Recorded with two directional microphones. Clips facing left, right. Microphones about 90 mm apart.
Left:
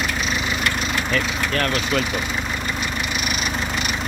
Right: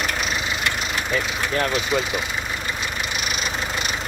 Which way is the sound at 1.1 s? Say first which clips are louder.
Right 1 dB; 15° right (ahead or behind).